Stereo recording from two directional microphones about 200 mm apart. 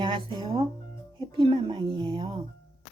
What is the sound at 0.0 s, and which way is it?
Speech, 25° right (ahead or behind).